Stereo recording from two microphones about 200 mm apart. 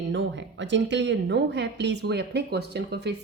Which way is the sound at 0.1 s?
65° right (ahead or behind).